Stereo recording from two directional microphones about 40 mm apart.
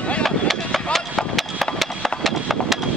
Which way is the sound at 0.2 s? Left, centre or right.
Centre.